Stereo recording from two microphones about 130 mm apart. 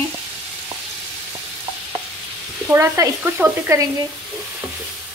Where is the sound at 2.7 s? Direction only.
20° right (ahead or behind).